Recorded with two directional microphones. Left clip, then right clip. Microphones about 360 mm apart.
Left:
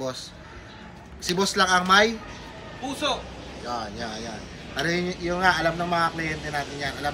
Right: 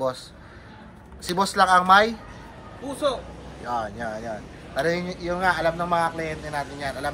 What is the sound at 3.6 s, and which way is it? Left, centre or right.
Speech, right.